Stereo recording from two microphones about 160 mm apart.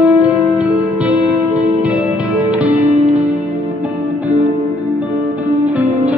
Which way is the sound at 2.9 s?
40° right (ahead or behind).